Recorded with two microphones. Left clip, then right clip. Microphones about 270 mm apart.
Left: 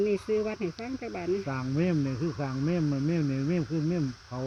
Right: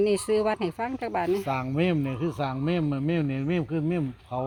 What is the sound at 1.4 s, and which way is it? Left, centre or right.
Speech, centre.